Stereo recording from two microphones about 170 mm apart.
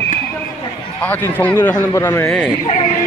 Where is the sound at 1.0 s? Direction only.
10° left (ahead or behind).